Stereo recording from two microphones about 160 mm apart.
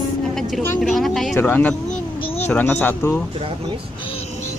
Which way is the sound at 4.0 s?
35° left (ahead or behind).